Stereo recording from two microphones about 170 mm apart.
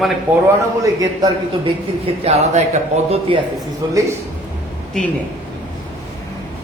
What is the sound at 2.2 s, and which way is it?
Speech, 40° right (ahead or behind).